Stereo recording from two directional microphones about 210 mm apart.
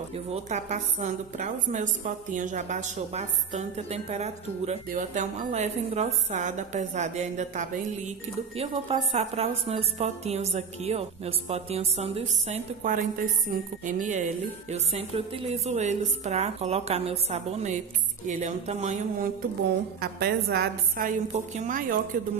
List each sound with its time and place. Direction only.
0.1 s a woman's voice: 30° right (ahead or behind)
20.0 s a woman's voice: 50° right (ahead or behind)